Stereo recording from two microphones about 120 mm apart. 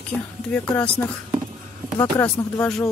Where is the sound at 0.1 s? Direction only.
10° left (ahead or behind).